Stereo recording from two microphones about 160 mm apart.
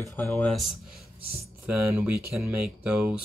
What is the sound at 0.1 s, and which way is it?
Speech, 10° left (ahead or behind).